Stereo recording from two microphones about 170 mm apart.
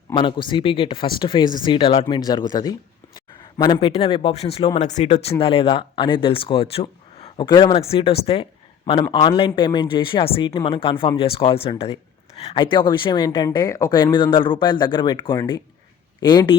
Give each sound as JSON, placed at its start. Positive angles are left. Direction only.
{"t": 0.1, "sound": "speech", "side_deg": 30}